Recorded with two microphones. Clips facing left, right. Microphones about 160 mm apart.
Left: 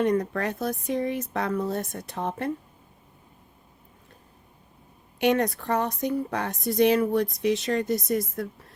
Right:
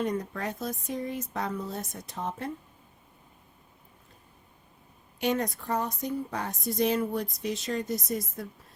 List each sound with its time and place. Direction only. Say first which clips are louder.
0.0 s speech: left 6 dB; 70° left (ahead or behind)
5.2 s speech: left 6 dB; 70° left (ahead or behind)